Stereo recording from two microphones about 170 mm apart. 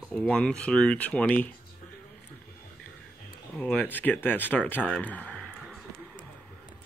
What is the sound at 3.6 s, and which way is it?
Speech, 10° left (ahead or behind).